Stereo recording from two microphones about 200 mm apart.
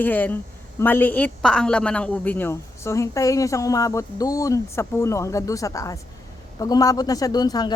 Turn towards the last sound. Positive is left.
turn(degrees=20)  # may be behind; listen again after turning